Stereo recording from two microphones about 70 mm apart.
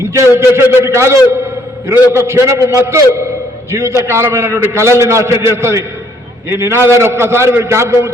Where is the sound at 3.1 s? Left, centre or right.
Right.